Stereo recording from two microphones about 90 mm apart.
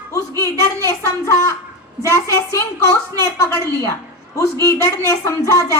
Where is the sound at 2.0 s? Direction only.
35° right (ahead or behind).